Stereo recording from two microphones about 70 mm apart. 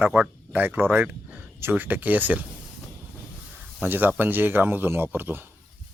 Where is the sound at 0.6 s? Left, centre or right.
Right.